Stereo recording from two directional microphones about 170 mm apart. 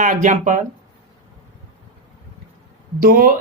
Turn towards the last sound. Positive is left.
turn(degrees=-60)  # may be behind; listen again after turning